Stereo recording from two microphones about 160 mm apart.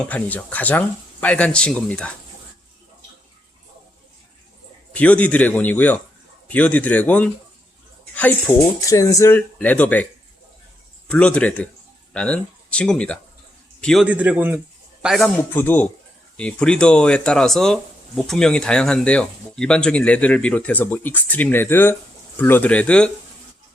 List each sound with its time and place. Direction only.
0.0 s speech: 10° left (ahead or behind)
4.9 s speech: 10° left (ahead or behind)
8.4 s speech: 20° left (ahead or behind)
11.1 s a man's voice: 5° left (ahead or behind)
14.1 s speech: 10° right (ahead or behind)
15.0 s a man's voice: centre (ahead or behind)
15.4 s speech: 10° left (ahead or behind)